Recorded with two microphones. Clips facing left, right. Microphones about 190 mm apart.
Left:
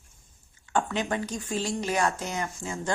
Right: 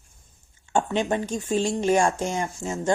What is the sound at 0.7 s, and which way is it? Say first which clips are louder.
Speech: right 4 dB; 25° right (ahead or behind).